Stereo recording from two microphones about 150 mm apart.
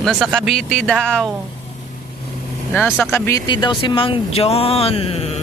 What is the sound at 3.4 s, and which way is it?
Speech, 30° left (ahead or behind).